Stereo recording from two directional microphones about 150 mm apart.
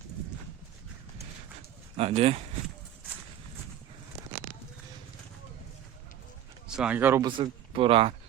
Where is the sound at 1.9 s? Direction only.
45° right (ahead or behind).